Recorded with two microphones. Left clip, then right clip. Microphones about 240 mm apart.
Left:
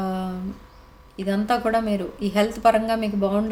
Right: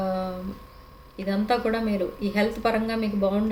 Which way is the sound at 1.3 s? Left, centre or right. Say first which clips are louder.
Left 3 dB; left.